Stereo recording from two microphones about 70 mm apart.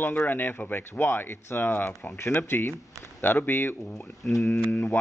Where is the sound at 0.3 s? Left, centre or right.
Left.